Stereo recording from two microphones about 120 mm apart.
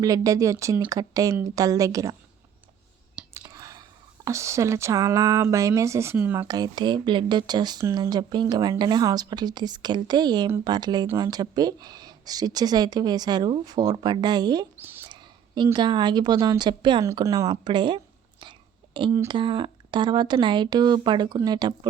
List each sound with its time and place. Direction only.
0.0 s speech: 30° right (ahead or behind)
3.4 s speech: 30° right (ahead or behind)
6.5 s a woman's voice: 35° right (ahead or behind)
17.2 s speech: 30° right (ahead or behind)